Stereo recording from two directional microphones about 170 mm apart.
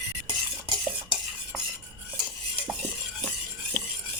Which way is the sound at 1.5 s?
5° right (ahead or behind).